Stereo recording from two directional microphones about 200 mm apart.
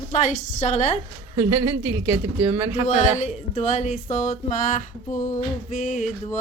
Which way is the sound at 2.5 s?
10° right (ahead or behind).